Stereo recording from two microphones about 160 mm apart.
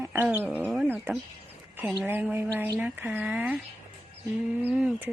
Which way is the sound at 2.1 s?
10° right (ahead or behind).